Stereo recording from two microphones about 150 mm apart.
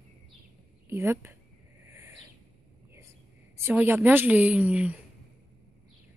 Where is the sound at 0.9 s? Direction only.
15° right (ahead or behind).